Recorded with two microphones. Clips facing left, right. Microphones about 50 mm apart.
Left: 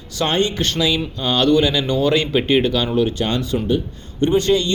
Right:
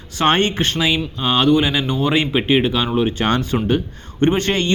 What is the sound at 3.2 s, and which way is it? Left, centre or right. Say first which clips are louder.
Speech: right 2 dB; right.